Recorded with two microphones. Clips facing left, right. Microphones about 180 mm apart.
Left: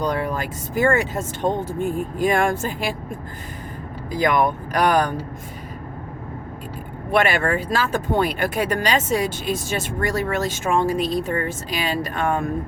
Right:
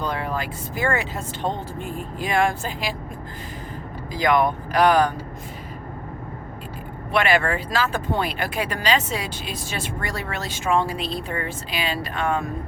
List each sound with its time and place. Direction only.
0.0 s speech: 45° left (ahead or behind)
4.1 s speech: 45° left (ahead or behind)
7.1 s speech: 45° left (ahead or behind)